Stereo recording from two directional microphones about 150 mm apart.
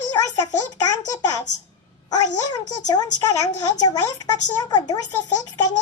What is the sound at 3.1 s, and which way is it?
A child's voice, 25° left (ahead or behind).